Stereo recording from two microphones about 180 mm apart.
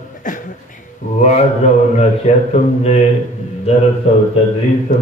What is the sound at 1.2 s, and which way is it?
A man's voice, 40° left (ahead or behind).